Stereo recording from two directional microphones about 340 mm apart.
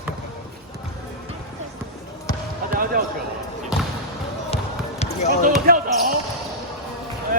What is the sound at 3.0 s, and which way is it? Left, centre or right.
Basketball bounce, right.